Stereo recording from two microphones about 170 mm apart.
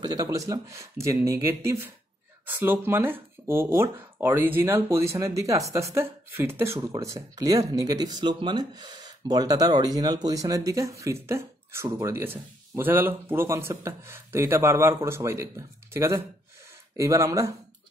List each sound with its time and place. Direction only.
0.0 s speech: 20° right (ahead or behind)